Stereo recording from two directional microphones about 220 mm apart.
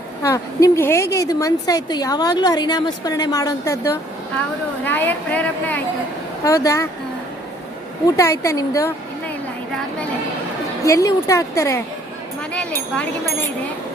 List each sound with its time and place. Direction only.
0.2 s a woman's voice: 15° left (ahead or behind)
8.0 s a woman's voice: 15° left (ahead or behind)
10.8 s a woman's voice: 15° left (ahead or behind)